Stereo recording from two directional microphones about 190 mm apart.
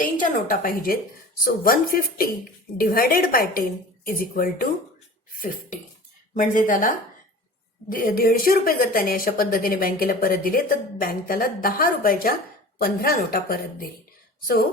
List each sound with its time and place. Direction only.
0.0 s a woman's voice: 45° left (ahead or behind)
6.3 s a woman's voice: 45° left (ahead or behind)